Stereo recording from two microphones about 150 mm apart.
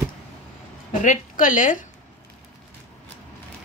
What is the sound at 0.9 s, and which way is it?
Speech, 60° left (ahead or behind).